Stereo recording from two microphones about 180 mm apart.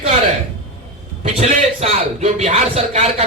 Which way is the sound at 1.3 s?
35° right (ahead or behind).